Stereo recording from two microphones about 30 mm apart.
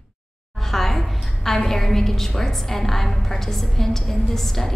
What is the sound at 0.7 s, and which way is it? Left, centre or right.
A woman's voice, centre.